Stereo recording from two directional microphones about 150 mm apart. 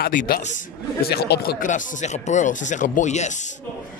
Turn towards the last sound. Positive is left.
turn(degrees=50)  # may be behind; listen again after turning